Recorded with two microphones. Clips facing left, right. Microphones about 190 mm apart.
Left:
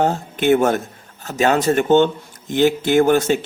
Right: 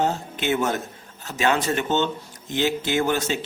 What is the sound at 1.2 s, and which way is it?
A man's voice, 40° left (ahead or behind).